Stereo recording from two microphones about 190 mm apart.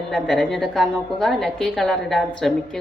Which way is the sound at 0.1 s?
Centre (ahead or behind).